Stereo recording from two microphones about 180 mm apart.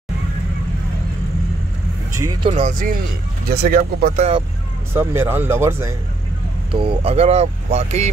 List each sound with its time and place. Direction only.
2.1 s speech: 20° right (ahead or behind)
2.5 s speech: 45° right (ahead or behind)
3.4 s speech: 60° right (ahead or behind)
4.9 s speech: 15° right (ahead or behind)
6.7 s speech: 30° right (ahead or behind)